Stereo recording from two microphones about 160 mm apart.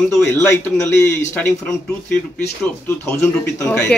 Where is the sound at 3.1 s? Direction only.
15° left (ahead or behind).